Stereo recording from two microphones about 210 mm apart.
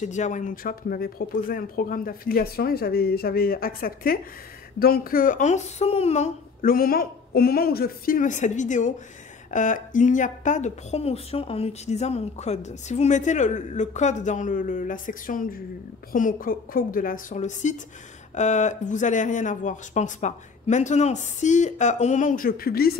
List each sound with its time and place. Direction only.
0.0 s speech: 35° left (ahead or behind)